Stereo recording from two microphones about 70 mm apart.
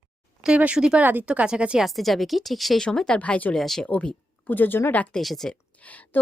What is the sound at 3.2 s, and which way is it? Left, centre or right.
Speech, left.